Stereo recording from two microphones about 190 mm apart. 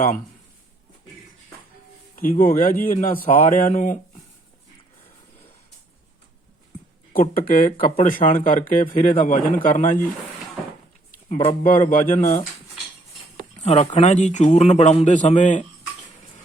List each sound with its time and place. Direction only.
2.1 s a man's voice: 45° left (ahead or behind)
7.1 s a man's voice: 50° left (ahead or behind)
11.3 s a man's voice: 35° left (ahead or behind)
13.6 s a man's voice: 35° left (ahead or behind)